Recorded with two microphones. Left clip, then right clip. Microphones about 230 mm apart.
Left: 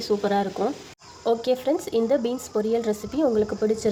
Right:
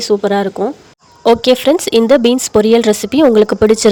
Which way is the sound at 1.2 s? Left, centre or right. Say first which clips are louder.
Right 13 dB; right.